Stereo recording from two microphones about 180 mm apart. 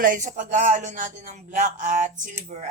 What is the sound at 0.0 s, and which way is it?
A man's voice, 45° right (ahead or behind).